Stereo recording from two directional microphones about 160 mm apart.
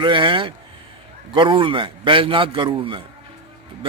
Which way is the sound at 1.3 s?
30° right (ahead or behind).